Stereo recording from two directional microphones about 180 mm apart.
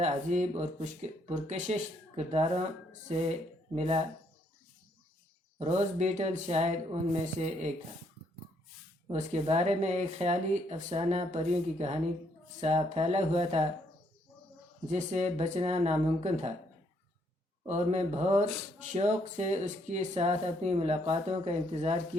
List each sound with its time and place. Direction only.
0.0 s speech: 40° right (ahead or behind)
3.8 s speech: 35° right (ahead or behind)
5.5 s speech: 40° right (ahead or behind)
9.1 s speech: 35° right (ahead or behind)
14.8 s speech: 40° right (ahead or behind)
17.7 s speech: 40° right (ahead or behind)